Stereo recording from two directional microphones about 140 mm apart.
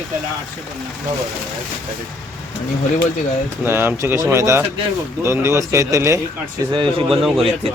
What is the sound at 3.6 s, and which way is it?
Speech, 15° right (ahead or behind).